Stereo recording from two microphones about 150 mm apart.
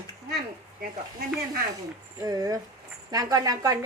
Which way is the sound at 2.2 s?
25° right (ahead or behind).